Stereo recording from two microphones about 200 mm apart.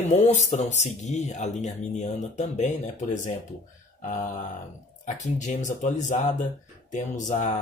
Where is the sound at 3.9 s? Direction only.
40° left (ahead or behind).